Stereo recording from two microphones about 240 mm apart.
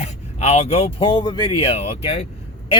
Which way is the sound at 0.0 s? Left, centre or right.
Left.